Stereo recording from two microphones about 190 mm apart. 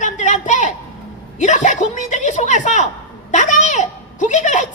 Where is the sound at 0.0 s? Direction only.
40° left (ahead or behind).